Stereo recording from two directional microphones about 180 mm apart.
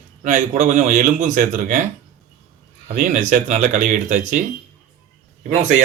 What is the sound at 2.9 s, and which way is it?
Speech, 45° right (ahead or behind).